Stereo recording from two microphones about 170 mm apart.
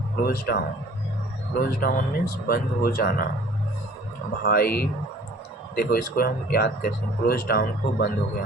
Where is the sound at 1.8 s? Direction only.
55° left (ahead or behind).